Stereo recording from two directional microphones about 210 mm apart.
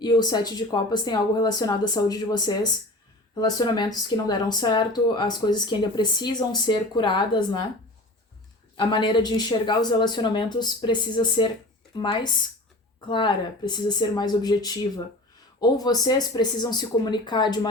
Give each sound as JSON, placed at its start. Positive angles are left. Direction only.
{"t": 0.0, "sound": "speech", "side_deg": 20}
{"t": 8.7, "sound": "speech", "side_deg": 20}